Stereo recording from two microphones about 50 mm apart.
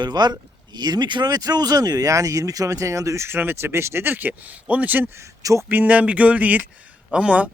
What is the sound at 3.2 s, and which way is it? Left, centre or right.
Speech, right.